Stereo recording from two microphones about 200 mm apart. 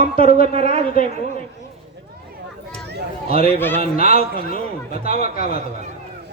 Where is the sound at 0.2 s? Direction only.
45° left (ahead or behind).